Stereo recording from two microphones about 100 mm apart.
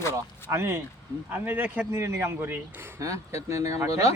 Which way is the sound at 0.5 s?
25° right (ahead or behind).